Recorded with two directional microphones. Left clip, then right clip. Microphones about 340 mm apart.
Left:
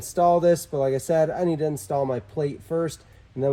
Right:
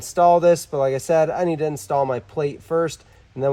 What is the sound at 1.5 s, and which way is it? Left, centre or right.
Speech, centre.